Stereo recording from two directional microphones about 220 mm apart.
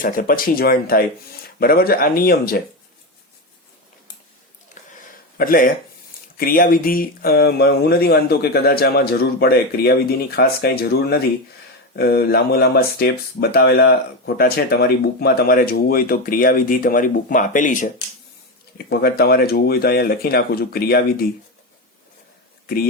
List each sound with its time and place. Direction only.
0.0 s speech: 40° left (ahead or behind)
5.4 s speech: 40° left (ahead or behind)
22.6 s speech: 45° left (ahead or behind)